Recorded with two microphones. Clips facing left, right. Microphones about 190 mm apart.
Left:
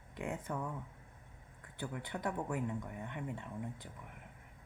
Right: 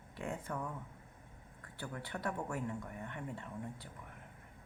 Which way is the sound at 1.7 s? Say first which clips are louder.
Left 2 dB; 20° left (ahead or behind).